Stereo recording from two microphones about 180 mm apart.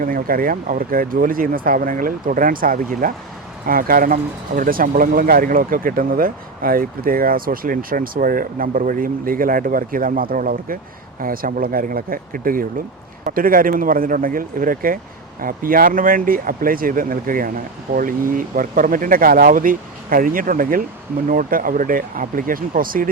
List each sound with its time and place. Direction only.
0.0 s speech: 50° right (ahead or behind)